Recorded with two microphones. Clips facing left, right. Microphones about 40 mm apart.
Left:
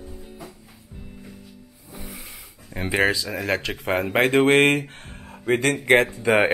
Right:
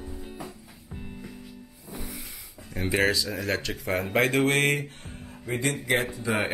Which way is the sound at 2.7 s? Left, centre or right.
Left.